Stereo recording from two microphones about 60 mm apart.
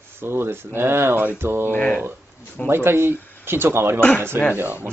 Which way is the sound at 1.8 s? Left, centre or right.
Centre.